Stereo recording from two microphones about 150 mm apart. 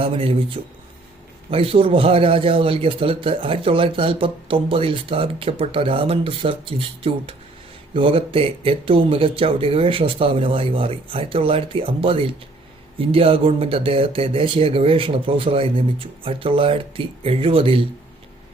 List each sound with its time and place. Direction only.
0.0 s a man's voice: 40° right (ahead or behind)